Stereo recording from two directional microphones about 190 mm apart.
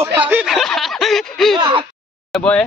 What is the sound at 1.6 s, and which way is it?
Speech, 25° right (ahead or behind).